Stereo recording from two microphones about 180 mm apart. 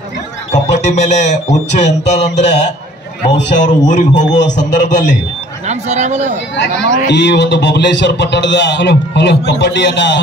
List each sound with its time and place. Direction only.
0.5 s speech: 40° left (ahead or behind)
5.7 s speech: 40° right (ahead or behind)
6.5 s a man's voice: 75° left (ahead or behind)